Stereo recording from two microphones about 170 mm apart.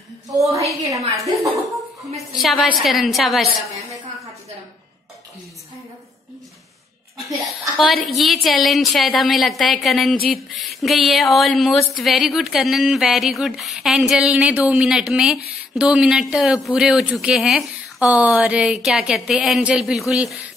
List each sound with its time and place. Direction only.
0.3 s a woman's voice: 20° right (ahead or behind)
2.1 s speech: centre (ahead or behind)
7.7 s speech: centre (ahead or behind)